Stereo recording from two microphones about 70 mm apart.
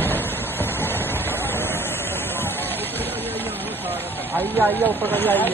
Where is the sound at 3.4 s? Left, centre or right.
Right.